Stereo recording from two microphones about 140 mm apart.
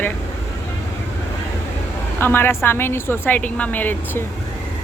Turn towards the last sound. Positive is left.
turn(degrees=10)  # may be behind; listen again after turning